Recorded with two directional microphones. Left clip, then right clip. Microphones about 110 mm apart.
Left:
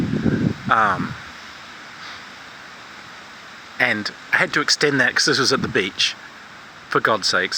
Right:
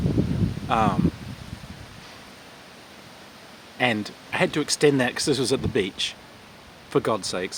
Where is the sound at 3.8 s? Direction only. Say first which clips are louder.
Left 4 dB; 25° right (ahead or behind).